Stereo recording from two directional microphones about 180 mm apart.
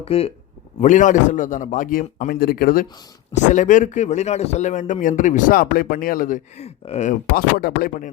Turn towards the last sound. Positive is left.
turn(degrees=60)  # may be behind; listen again after turning